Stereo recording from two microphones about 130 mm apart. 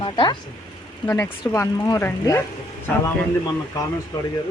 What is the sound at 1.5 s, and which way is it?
Speech, 25° left (ahead or behind).